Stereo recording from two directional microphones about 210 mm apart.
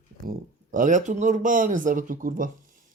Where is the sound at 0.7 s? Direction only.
35° right (ahead or behind).